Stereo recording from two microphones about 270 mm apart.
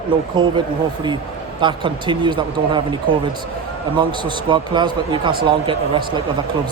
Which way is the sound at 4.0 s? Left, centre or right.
Centre.